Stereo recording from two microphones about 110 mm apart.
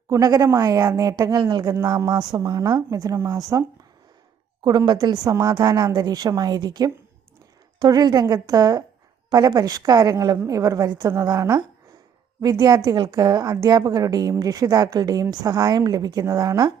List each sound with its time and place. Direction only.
0.1 s a woman's voice: 30° right (ahead or behind)
1.6 s a woman's voice: 25° right (ahead or behind)
4.9 s a woman's voice: 40° right (ahead or behind)